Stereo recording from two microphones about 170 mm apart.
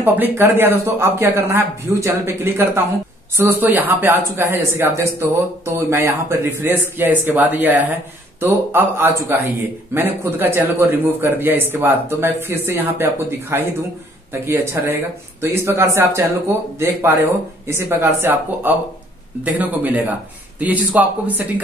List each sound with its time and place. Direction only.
0.0 s a man's voice: 10° right (ahead or behind)